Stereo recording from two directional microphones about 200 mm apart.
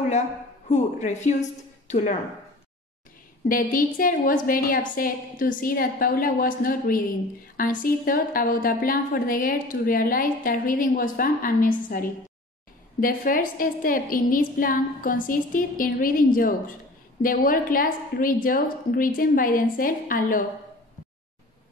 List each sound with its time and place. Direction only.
1.0 s a woman's voice: 35° left (ahead or behind)
3.4 s a woman's voice: 45° left (ahead or behind)